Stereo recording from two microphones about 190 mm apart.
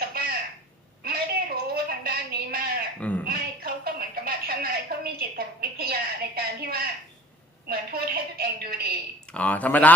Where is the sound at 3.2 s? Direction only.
55° right (ahead or behind).